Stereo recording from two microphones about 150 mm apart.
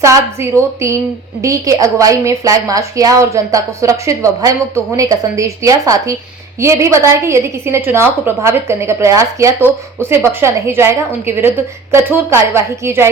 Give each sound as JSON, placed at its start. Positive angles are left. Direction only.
{"t": 0.0, "sound": "a woman's voice", "side_deg": -20}